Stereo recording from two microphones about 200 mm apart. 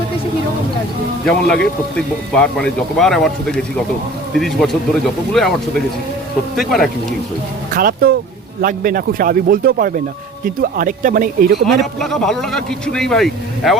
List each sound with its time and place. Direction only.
1.2 s speech: 5° left (ahead or behind)
6.6 s speech: centre (ahead or behind)
7.7 s a man's voice: 45° right (ahead or behind)
11.6 s speech: centre (ahead or behind)